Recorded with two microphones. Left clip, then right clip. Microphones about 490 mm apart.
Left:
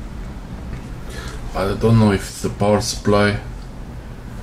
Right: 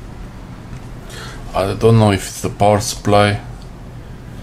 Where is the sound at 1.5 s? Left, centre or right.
Right.